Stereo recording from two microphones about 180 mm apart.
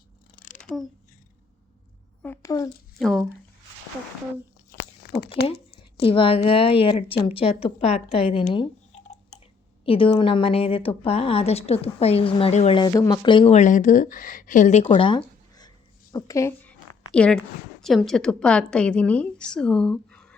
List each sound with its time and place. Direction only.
0.3 s a sound: 45° left (ahead or behind)
2.2 s a sound: 15° left (ahead or behind)
3.0 s a woman's voice: centre (ahead or behind)
5.0 s speech: 60° left (ahead or behind)
5.5 s a woman's voice: 30° left (ahead or behind)
12.8 s a woman's voice: 20° left (ahead or behind)
16.1 s a woman's voice: 20° left (ahead or behind)
17.1 s a woman's voice: 5° left (ahead or behind)